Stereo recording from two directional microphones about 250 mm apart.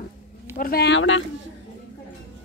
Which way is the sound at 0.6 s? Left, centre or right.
Left.